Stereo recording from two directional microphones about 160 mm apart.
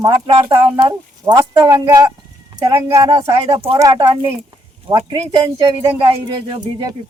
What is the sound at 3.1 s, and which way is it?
Speech, 35° right (ahead or behind).